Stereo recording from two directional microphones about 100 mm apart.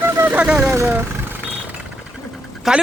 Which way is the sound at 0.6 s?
25° right (ahead or behind).